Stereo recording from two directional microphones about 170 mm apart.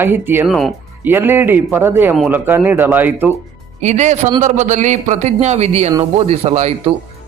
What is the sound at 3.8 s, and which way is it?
A man's voice, 40° right (ahead or behind).